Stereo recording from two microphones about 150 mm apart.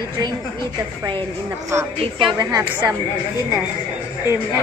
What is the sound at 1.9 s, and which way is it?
Speech, 35° right (ahead or behind).